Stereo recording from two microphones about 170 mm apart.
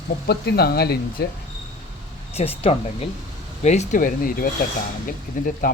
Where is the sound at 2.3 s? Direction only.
35° left (ahead or behind).